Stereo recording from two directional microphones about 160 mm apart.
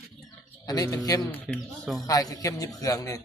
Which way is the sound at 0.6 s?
25° left (ahead or behind).